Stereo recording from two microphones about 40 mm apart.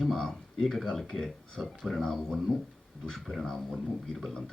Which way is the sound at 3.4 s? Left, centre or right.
Centre.